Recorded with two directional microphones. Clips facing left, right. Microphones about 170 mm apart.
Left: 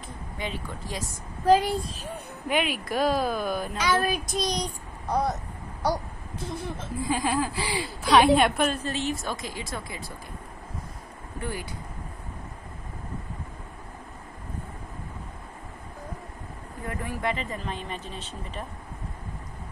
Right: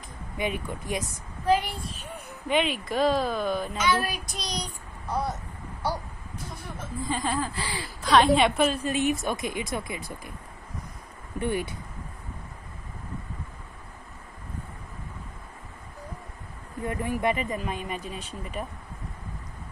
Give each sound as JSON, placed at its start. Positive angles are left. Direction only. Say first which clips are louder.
{"t": 0.4, "sound": "speech", "louder": "right 5 dB", "side_deg": -20}
{"t": 1.4, "sound": "speech", "louder": "left 4 dB", "side_deg": 40}
{"t": 2.4, "sound": "speech", "louder": "right 1 dB", "side_deg": 5}
{"t": 3.7, "sound": "child singing", "louder": "left 1 dB", "side_deg": 40}
{"t": 7.0, "sound": "speech", "louder": "left 2 dB", "side_deg": 5}
{"t": 7.5, "sound": "a woman's voice", "louder": "left 4 dB", "side_deg": 15}
{"t": 8.7, "sound": "speech", "louder": "right 4 dB", "side_deg": -15}
{"t": 11.3, "sound": "speech", "louder": "right 6 dB", "side_deg": -25}
{"t": 16.8, "sound": "speech", "louder": "right 4 dB", "side_deg": -20}